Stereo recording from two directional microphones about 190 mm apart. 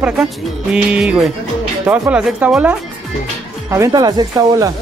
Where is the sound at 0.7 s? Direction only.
5° right (ahead or behind).